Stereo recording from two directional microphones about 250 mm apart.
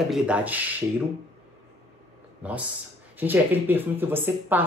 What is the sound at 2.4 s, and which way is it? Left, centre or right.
Speech, centre.